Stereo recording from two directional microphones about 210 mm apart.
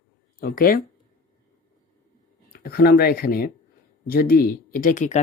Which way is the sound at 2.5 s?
45° left (ahead or behind).